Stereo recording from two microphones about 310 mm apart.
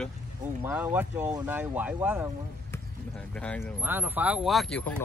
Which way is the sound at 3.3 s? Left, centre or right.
Centre.